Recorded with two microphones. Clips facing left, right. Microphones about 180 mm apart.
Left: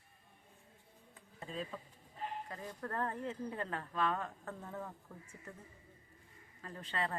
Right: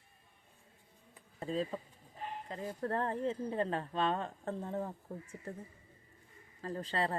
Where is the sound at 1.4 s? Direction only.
35° right (ahead or behind).